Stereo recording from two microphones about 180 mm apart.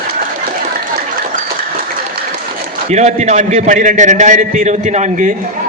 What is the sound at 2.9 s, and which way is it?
A man's voice, 40° right (ahead or behind).